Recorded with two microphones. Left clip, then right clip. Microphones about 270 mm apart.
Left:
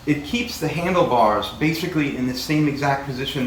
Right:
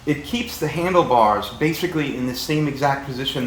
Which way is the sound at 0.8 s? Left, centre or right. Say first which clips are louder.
Right 2 dB; right.